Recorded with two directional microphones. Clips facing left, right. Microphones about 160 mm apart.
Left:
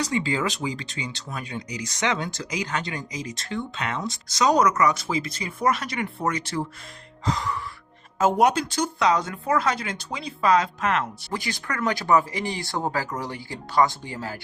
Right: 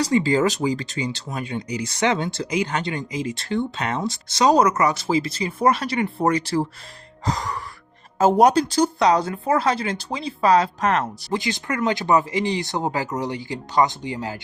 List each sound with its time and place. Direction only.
0.0 s speech: 35° right (ahead or behind)
7.3 s music: 40° right (ahead or behind)
8.2 s speech: 35° right (ahead or behind)
11.3 s speech: 20° right (ahead or behind)